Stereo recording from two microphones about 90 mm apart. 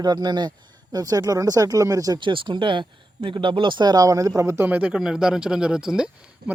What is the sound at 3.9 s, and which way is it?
Speech, 40° right (ahead or behind).